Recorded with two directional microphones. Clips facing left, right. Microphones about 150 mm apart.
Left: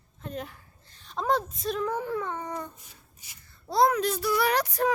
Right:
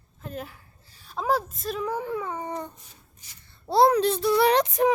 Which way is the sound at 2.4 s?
20° right (ahead or behind).